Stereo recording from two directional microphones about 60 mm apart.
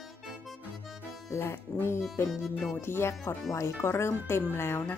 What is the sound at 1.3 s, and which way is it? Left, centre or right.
Speech, left.